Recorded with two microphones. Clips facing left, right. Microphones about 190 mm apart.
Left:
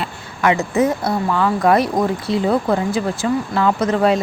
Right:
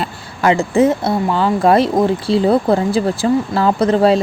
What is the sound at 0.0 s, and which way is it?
Speech, 30° right (ahead or behind).